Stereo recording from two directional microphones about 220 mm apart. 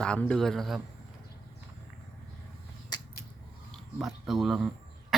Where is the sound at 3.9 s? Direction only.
Centre (ahead or behind).